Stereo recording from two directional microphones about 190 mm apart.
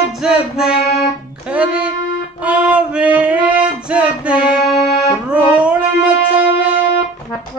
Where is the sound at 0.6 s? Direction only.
55° left (ahead or behind).